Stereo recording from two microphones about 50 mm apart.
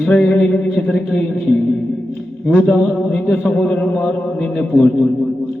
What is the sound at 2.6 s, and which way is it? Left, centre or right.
A man's voice, centre.